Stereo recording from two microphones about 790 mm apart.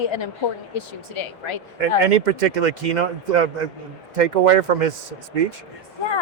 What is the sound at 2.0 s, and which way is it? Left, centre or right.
Speech, right.